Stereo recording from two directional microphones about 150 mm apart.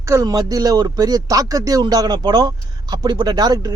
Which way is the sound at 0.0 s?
20° right (ahead or behind).